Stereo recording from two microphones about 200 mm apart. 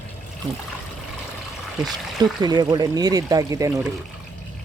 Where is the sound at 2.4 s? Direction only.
20° right (ahead or behind).